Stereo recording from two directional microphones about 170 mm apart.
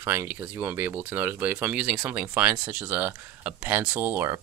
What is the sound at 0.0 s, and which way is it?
Speech, 15° right (ahead or behind).